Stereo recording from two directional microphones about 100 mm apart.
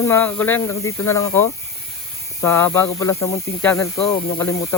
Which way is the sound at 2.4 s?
20° left (ahead or behind).